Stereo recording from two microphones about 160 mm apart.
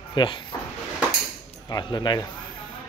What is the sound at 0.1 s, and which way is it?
Speech, 30° left (ahead or behind).